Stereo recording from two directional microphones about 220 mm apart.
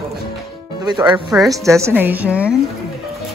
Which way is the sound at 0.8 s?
20° right (ahead or behind).